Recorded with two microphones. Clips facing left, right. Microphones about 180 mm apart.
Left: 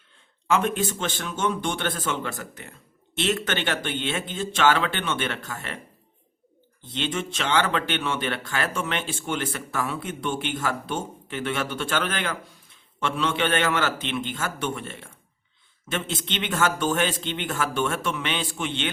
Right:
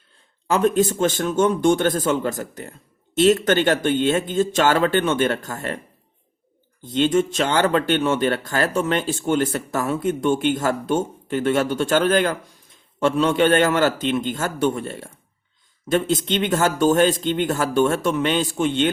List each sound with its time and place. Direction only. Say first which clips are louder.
0.4 s speech: right 6 dB; 40° right (ahead or behind)
6.8 s speech: right 11 dB; 45° right (ahead or behind)